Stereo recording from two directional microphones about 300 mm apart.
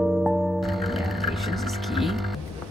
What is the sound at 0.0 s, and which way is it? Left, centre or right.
Music, centre.